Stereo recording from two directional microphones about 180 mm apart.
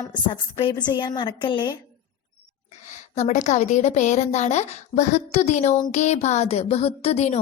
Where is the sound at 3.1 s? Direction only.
40° left (ahead or behind).